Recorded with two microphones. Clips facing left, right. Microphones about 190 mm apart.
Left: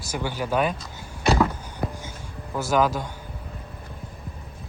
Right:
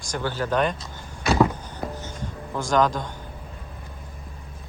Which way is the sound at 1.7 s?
10° left (ahead or behind).